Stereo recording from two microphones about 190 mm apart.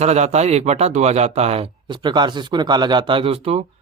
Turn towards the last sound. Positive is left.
turn(degrees=-30)  # may be behind; listen again after turning